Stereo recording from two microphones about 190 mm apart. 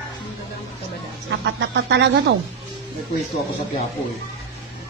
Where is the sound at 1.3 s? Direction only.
65° right (ahead or behind).